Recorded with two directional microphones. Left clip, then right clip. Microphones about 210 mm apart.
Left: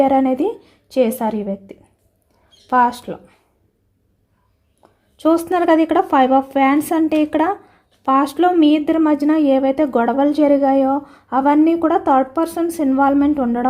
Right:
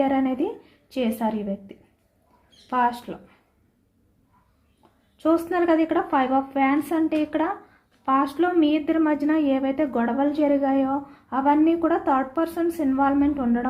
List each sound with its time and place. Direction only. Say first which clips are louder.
0.0 s speech: left 8 dB; 45° left (ahead or behind)
5.1 s speech: left 6 dB; 50° left (ahead or behind)